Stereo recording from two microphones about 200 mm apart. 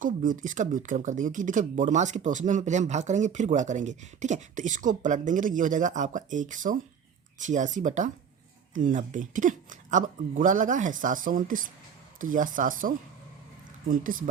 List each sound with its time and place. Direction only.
0.0 s speech: 40° right (ahead or behind)